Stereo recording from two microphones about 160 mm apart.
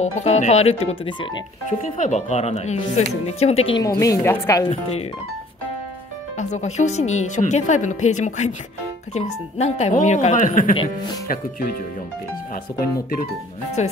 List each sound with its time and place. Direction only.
0.0 s speech: 45° left (ahead or behind)
1.7 s a woman's voice: 50° left (ahead or behind)
3.7 s a woman's voice: 20° left (ahead or behind)
6.3 s a woman's voice: 45° left (ahead or behind)
10.7 s speech: 35° left (ahead or behind)
13.8 s a woman's voice: 45° left (ahead or behind)